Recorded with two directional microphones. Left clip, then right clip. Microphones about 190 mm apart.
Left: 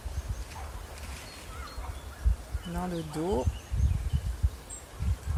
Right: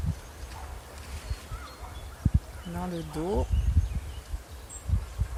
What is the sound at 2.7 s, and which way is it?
Speech, 15° left (ahead or behind).